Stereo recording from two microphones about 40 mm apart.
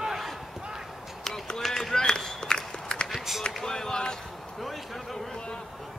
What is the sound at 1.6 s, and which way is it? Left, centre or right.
Run, centre.